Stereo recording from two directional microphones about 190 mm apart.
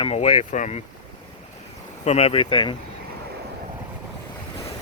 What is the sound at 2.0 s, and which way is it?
Speech, 35° left (ahead or behind).